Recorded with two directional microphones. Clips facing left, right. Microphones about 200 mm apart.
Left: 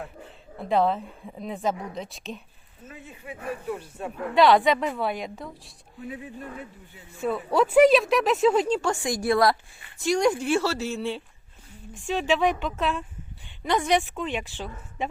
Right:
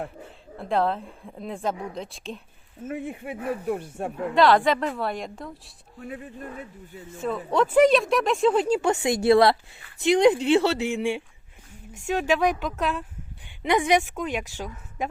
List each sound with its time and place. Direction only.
0.6 s a woman's voice: centre (ahead or behind)
2.8 s speech: 55° right (ahead or behind)
4.4 s a woman's voice: centre (ahead or behind)
7.3 s a woman's voice: 5° left (ahead or behind)
8.6 s a woman's voice: 10° right (ahead or behind)
8.9 s a woman's voice: 20° right (ahead or behind); by 13.1 s centre (ahead or behind)
13.6 s a woman's voice: 15° right (ahead or behind)